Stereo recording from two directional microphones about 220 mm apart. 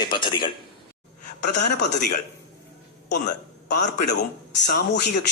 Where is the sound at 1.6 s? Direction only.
50° left (ahead or behind).